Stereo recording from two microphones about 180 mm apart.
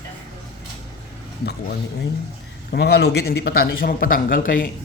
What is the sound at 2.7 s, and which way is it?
Speech, 65° left (ahead or behind).